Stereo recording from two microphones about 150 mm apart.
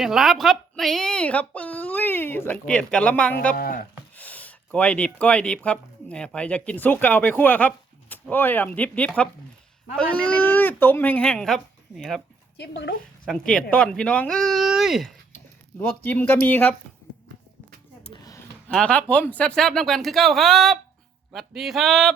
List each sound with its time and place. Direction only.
0.0 s a woman's voice: centre (ahead or behind)
3.5 s speech: 75° left (ahead or behind)
4.1 s a woman's voice: 10° left (ahead or behind)
13.2 s speech: 5° left (ahead or behind)
15.8 s a woman's voice: 10° left (ahead or behind)
18.1 s a sound: 25° left (ahead or behind)
18.7 s speech: 5° left (ahead or behind)